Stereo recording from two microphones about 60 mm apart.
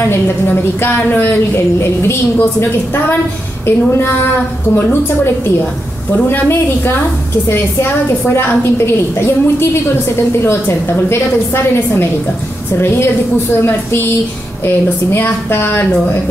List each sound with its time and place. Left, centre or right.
0.1 s a woman's voice: left
7.4 s a woman's voice: left
15.1 s a woman's voice: left